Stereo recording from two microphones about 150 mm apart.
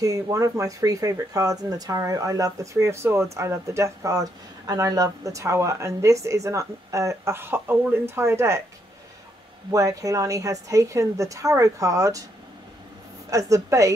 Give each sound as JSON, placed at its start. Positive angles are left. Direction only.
{"t": 0.0, "sound": "speech", "side_deg": -20}
{"t": 9.7, "sound": "speech", "side_deg": -20}
{"t": 13.3, "sound": "speech", "side_deg": -20}